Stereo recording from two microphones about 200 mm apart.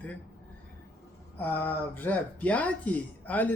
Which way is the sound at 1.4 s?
10° left (ahead or behind).